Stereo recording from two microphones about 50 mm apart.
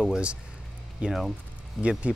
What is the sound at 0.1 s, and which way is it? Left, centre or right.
Speech, right.